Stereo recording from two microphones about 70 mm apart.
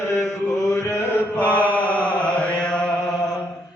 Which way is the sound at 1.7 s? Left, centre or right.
Left.